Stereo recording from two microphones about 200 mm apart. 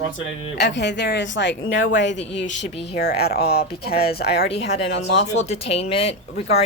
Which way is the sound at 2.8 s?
55° left (ahead or behind).